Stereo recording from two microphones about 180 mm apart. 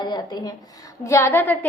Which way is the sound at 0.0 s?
20° left (ahead or behind).